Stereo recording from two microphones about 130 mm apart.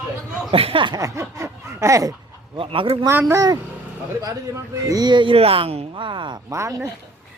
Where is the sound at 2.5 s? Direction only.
40° right (ahead or behind).